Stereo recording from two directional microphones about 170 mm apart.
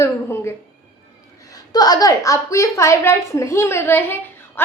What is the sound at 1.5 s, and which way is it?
A woman's voice, 25° left (ahead or behind).